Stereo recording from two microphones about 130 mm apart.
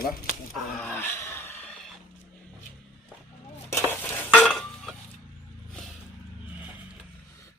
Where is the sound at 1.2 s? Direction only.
20° left (ahead or behind).